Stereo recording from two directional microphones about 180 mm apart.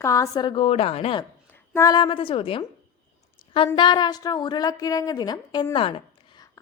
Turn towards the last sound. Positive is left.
turn(degrees=30)  # may be behind; listen again after turning